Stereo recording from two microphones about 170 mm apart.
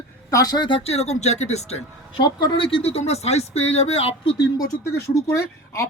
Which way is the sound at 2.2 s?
30° left (ahead or behind).